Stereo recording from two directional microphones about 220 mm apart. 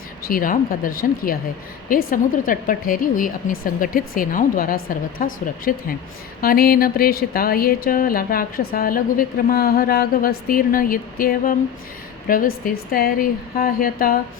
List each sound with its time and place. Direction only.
0.3 s speech: 40° left (ahead or behind)